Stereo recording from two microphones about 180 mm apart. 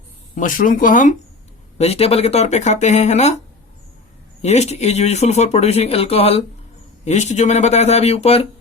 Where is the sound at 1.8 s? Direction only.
35° left (ahead or behind).